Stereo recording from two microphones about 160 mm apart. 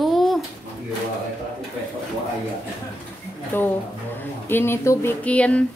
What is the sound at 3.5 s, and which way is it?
Speech, 10° left (ahead or behind).